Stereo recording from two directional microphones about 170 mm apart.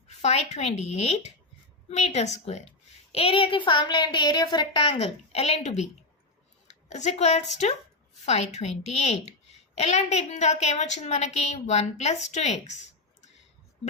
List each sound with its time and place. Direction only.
0.1 s a woman's voice: 40° left (ahead or behind)